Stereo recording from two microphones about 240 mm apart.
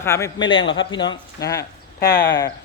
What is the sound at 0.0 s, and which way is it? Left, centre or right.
A man's voice, centre.